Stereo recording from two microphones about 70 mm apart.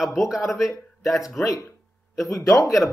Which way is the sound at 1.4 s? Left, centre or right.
Left.